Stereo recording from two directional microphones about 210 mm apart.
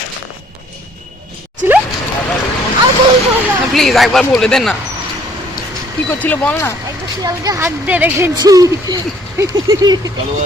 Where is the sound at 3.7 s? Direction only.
Centre (ahead or behind).